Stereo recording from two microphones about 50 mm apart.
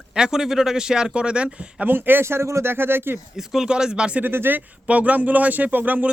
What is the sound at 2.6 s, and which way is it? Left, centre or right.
Speech, right.